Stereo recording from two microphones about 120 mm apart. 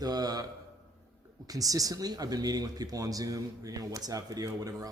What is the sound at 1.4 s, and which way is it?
Speech, 30° right (ahead or behind).